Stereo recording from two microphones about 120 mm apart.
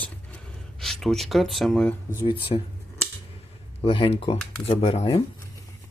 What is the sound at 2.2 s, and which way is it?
Speech, 50° left (ahead or behind).